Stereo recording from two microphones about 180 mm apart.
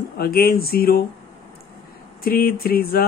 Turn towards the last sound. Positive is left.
turn(degrees=55)  # may be behind; listen again after turning